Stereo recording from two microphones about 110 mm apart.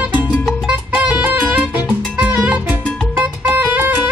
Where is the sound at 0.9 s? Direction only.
20° right (ahead or behind).